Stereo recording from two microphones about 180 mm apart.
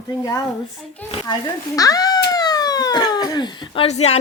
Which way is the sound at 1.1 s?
20° left (ahead or behind).